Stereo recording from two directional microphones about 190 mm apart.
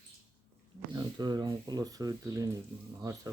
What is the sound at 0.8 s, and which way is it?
Speech, 20° right (ahead or behind).